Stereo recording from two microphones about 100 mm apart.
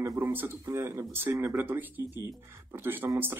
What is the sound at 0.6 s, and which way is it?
Speech, 30° right (ahead or behind).